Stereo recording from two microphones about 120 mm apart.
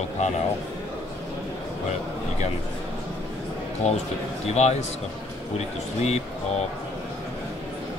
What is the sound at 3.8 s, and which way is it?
A man's voice, 70° left (ahead or behind).